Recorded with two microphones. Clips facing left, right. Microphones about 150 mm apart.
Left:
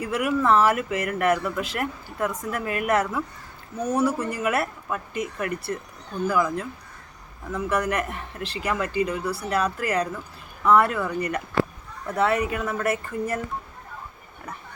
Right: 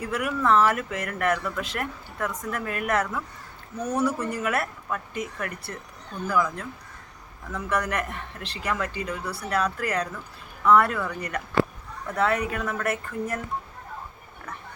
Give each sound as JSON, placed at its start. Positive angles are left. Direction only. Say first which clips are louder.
{"t": 0.0, "sound": "a woman's voice", "louder": "left 3 dB", "side_deg": 5}